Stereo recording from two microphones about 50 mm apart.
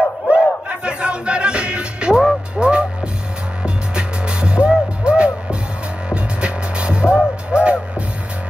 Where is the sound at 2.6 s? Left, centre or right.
Centre.